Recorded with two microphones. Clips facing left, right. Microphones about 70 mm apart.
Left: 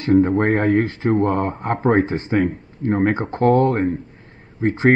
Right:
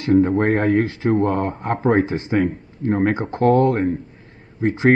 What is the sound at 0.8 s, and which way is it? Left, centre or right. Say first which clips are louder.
Speech: even; left.